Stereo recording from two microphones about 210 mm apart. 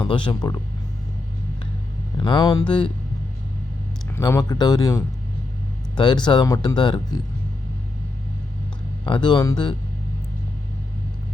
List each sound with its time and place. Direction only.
0.0 s speech: 25° left (ahead or behind)
2.1 s speech: 20° left (ahead or behind)
4.1 s speech: 15° left (ahead or behind)
9.0 s speech: 20° left (ahead or behind)